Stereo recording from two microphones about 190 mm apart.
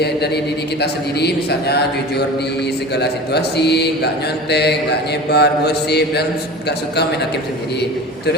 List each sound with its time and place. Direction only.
0.8 s mantra: 60° left (ahead or behind)